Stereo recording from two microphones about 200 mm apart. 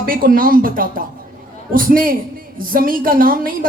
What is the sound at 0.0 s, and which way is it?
Speech, 45° right (ahead or behind).